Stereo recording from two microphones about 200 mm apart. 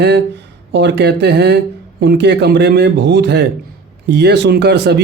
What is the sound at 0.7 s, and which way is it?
A man's voice, 60° right (ahead or behind).